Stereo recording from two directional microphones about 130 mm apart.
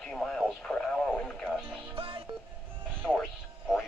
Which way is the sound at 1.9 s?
45° right (ahead or behind).